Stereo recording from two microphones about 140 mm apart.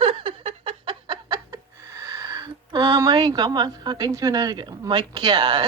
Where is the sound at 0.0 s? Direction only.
40° right (ahead or behind).